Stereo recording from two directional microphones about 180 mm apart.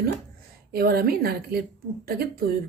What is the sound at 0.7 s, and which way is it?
A woman's voice, 60° right (ahead or behind).